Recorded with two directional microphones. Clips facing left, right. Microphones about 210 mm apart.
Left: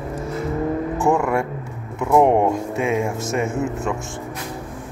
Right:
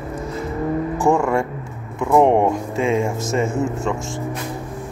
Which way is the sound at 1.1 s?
5° left (ahead or behind).